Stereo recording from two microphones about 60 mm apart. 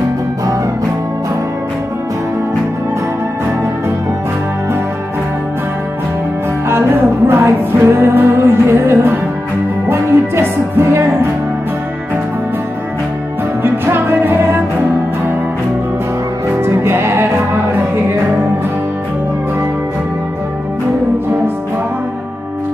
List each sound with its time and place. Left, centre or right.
7.2 s music: right
13.6 s music: right
16.6 s music: right